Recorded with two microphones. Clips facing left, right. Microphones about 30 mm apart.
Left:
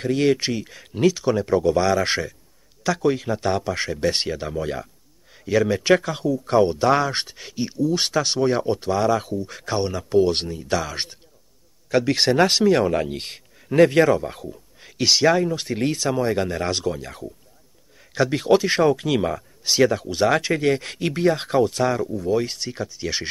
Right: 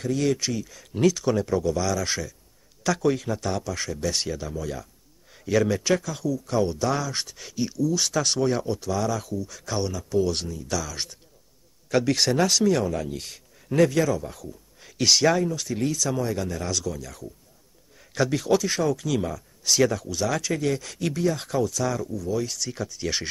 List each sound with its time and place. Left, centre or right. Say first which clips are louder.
0.0 s speech: left 5 dB; left
0.9 s speech: left 2 dB; centre
1.5 s speech: left 6 dB; left
2.8 s speech: left 2 dB; centre; by 4.8 s left
5.3 s a sound: left 2 dB; centre
5.9 s speech: left 5 dB; left
8.1 s speech: left 3 dB; left
11.9 s speech: left 3 dB; centre; by 14.6 s left
14.8 s speech: left 2 dB; left
15.5 s speech: left 3 dB; left
17.9 s a sound: left 3 dB; centre
18.3 s speech: left 6 dB; left
19.6 s speech: left 3 dB; left
22.7 s speech: left 2 dB; centre